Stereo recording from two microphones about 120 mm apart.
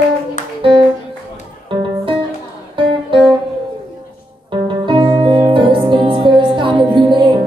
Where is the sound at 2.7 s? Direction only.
45° right (ahead or behind).